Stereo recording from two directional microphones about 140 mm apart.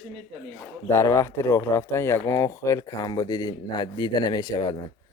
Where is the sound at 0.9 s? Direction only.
20° left (ahead or behind).